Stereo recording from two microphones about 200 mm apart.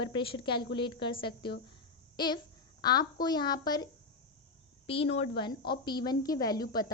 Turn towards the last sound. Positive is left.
turn(degrees=20)  # may be behind; listen again after turning